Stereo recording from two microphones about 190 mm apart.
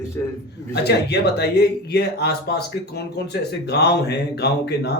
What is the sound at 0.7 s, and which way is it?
Speech, 60° left (ahead or behind).